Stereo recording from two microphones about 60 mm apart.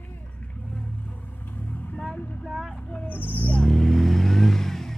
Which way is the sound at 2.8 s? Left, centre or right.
Left.